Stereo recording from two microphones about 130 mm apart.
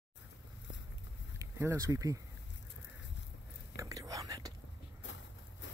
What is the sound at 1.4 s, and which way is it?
Speech, 25° right (ahead or behind).